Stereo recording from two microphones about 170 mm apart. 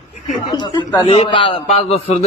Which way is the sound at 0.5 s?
25° left (ahead or behind).